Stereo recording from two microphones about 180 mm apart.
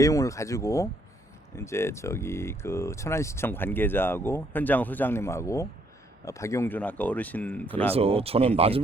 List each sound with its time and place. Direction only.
0.0 s speech: 20° left (ahead or behind)
7.9 s speech: 35° right (ahead or behind)